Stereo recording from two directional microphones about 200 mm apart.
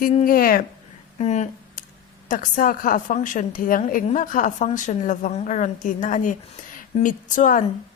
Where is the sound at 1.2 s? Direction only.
35° left (ahead or behind).